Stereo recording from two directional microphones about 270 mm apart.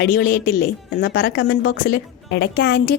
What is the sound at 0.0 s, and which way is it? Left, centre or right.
A woman's voice, left.